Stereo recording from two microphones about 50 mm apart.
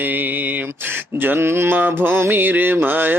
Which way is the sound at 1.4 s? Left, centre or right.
Right.